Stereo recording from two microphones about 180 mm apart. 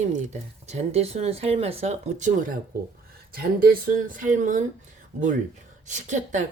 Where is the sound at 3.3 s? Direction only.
55° right (ahead or behind).